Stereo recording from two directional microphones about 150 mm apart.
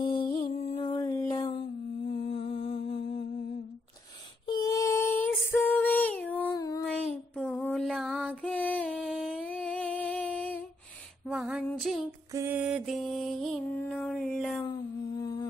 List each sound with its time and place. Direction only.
0.0 s music: 35° left (ahead or behind)
0.7 s a sound: 30° left (ahead or behind)
2.0 s humming: 40° left (ahead or behind)
4.5 s female singing: 25° left (ahead or behind)
6.5 s child singing: 25° left (ahead or behind)
7.3 s a sound: 5° left (ahead or behind)
11.2 s female singing: 5° right (ahead or behind)
11.7 s child singing: centre (ahead or behind)
12.3 s mantra: 20° right (ahead or behind)
12.5 s music: 5° right (ahead or behind)
13.7 s a sound: 5° left (ahead or behind)
15.1 s humming: 25° left (ahead or behind)